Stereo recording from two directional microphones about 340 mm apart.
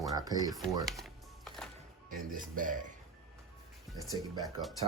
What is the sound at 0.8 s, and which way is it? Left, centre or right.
Typing, centre.